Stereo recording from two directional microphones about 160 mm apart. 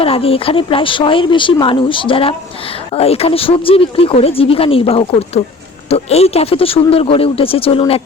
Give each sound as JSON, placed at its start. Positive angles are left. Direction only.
{"t": 0.0, "sound": "speech", "side_deg": 35}